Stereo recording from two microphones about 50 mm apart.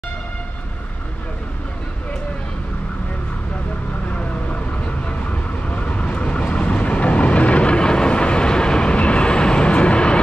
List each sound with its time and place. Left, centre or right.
5.0 s vehicle: left